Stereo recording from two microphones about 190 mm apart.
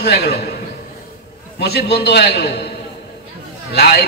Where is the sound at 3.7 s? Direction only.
60° left (ahead or behind).